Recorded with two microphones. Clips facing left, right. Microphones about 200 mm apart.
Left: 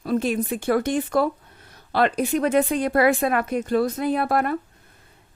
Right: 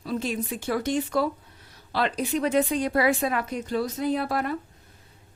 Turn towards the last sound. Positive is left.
turn(degrees=55)  # may be behind; listen again after turning